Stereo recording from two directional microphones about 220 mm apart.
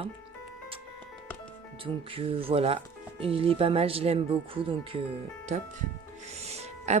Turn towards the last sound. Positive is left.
turn(degrees=-30)  # may be behind; listen again after turning